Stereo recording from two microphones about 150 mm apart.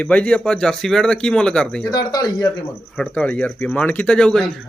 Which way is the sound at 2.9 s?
5° left (ahead or behind).